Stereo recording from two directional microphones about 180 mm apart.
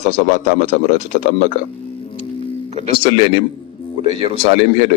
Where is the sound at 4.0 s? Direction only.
30° right (ahead or behind).